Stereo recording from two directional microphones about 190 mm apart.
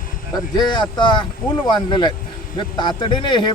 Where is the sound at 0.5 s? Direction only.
20° left (ahead or behind).